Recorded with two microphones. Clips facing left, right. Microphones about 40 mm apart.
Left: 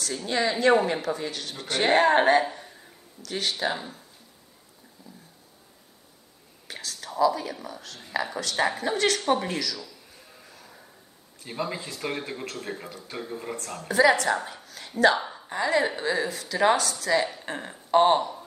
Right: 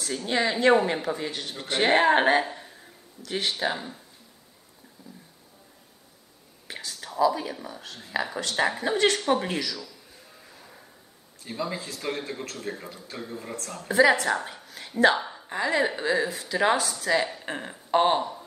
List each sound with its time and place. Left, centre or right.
0.1 s a woman's voice: centre
2.4 s a sound: centre
3.3 s speech: centre
3.5 s a woman's voice: centre
6.7 s whispering: centre
7.2 s a woman's voice: centre
9.8 s a sound: centre
10.5 s a sound: centre
11.4 s speech: centre
13.8 s a woman's voice: centre
14.6 s a sound: centre
15.1 s a woman's voice: centre